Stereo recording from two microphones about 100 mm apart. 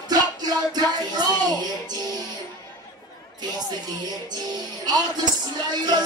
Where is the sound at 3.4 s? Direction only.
40° right (ahead or behind).